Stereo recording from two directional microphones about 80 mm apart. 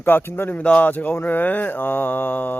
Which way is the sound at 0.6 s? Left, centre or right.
Centre.